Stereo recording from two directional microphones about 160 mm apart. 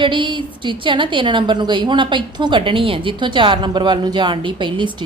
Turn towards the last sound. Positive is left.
turn(degrees=-30)  # may be behind; listen again after turning